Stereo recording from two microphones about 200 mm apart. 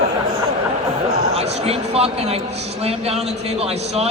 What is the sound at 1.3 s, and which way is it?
A man's voice, 30° right (ahead or behind).